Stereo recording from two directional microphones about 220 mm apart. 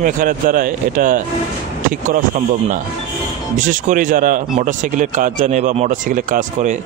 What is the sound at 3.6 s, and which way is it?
Speech, 35° right (ahead or behind).